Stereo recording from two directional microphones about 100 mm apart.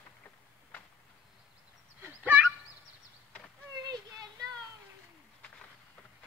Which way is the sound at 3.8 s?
40° right (ahead or behind).